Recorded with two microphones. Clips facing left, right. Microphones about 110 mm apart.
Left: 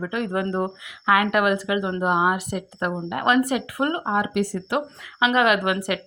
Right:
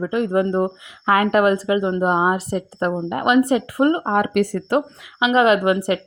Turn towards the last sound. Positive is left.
turn(degrees=-30)  # may be behind; listen again after turning